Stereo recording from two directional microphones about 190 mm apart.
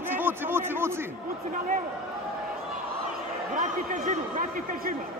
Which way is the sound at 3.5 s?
40° right (ahead or behind).